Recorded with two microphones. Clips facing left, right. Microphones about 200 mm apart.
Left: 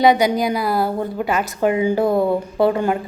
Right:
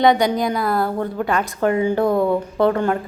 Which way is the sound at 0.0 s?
5° left (ahead or behind).